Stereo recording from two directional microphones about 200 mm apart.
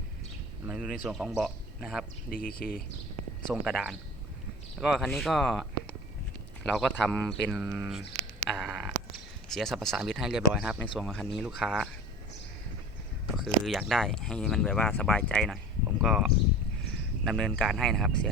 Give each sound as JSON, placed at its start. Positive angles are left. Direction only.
{"t": 0.7, "sound": "a man's voice", "side_deg": 0}
{"t": 2.3, "sound": "speech", "side_deg": 45}
{"t": 3.5, "sound": "speech", "side_deg": 0}
{"t": 13.3, "sound": "speech", "side_deg": 0}